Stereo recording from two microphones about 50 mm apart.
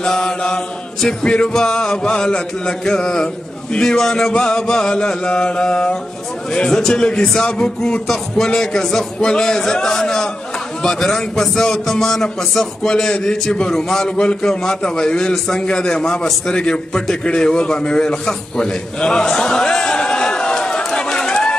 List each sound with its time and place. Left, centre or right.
0.0 s mantra: centre
1.2 s a man's voice: centre
18.2 s a sound: centre